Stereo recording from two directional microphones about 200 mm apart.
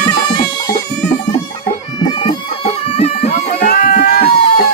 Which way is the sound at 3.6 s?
45° left (ahead or behind).